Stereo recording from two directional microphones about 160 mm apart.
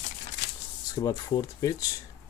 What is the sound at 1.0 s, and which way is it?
Speech, 25° left (ahead or behind).